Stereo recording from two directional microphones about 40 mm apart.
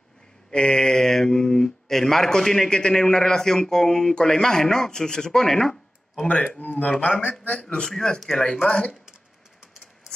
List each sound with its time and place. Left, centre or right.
0.5 s speech: left
6.6 s speech: left
7.5 s speech: centre